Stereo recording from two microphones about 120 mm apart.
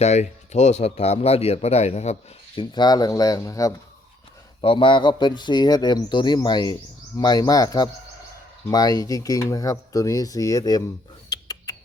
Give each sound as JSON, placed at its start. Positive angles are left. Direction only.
{"t": 0.0, "sound": "speech", "side_deg": 70}
{"t": 2.6, "sound": "speech", "side_deg": 35}
{"t": 4.6, "sound": "speech", "side_deg": 50}
{"t": 11.4, "sound": "a sound", "side_deg": 30}